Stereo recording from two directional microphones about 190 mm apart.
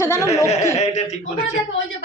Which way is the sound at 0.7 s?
35° left (ahead or behind).